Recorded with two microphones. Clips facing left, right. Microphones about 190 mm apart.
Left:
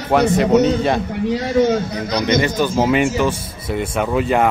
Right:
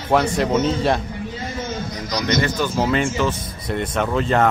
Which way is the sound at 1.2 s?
75° left (ahead or behind).